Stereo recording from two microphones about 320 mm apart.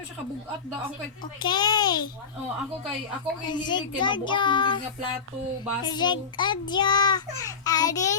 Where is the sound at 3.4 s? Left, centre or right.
Centre.